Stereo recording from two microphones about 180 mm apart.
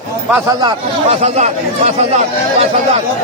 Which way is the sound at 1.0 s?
35° right (ahead or behind).